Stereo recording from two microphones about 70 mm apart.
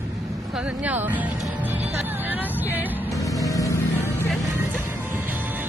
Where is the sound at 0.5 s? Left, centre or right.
Centre.